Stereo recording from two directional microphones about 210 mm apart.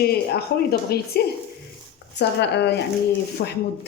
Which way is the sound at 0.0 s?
50° left (ahead or behind).